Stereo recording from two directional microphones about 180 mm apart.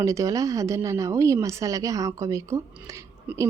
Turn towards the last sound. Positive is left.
turn(degrees=-15)  # may be behind; listen again after turning